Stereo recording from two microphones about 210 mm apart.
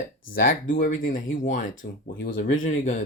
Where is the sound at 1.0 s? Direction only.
40° left (ahead or behind).